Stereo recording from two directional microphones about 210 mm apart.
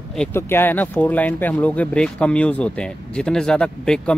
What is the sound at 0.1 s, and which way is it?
Speech, 5° left (ahead or behind).